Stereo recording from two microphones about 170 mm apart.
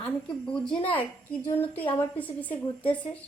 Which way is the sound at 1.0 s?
10° left (ahead or behind).